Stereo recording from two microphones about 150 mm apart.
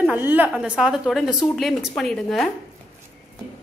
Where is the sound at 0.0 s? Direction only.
10° right (ahead or behind).